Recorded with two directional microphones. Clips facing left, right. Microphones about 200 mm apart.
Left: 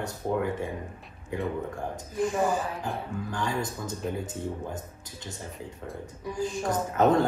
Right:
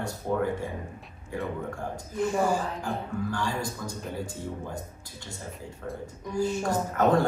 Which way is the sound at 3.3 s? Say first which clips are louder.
Even; 20° left (ahead or behind).